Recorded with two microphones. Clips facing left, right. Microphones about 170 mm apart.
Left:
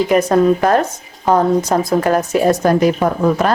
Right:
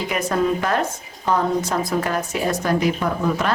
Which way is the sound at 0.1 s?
40° left (ahead or behind).